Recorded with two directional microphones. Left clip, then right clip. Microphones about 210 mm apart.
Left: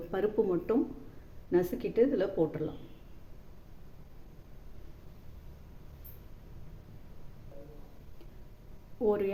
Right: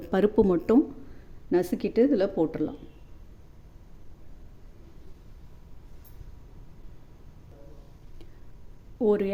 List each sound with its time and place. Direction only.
0.1 s speech: 50° right (ahead or behind)
9.0 s speech: 35° right (ahead or behind)